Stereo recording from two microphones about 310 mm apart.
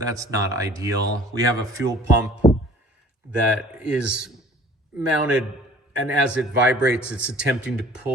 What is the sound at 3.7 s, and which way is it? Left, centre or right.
Speech, centre.